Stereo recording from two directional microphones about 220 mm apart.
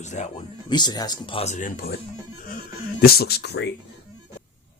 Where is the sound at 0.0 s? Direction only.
30° left (ahead or behind).